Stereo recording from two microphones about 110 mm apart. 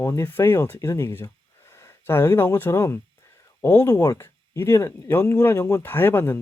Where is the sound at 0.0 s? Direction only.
25° left (ahead or behind).